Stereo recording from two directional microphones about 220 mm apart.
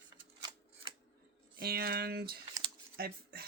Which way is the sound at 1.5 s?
45° right (ahead or behind).